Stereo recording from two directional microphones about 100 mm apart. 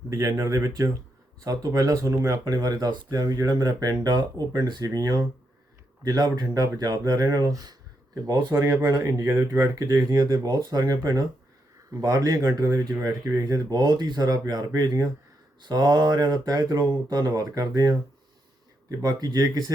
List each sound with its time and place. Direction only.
0.1 s speech: 30° right (ahead or behind)
2.4 s speech: 40° right (ahead or behind)